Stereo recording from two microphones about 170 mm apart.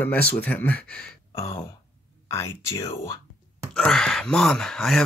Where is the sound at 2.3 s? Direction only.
15° left (ahead or behind).